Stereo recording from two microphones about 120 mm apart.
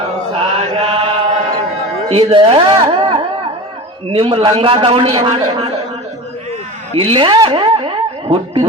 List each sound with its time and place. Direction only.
0.3 s chant: 50° right (ahead or behind)
2.0 s a woman's voice: 55° right (ahead or behind)
6.9 s a sound: 50° right (ahead or behind)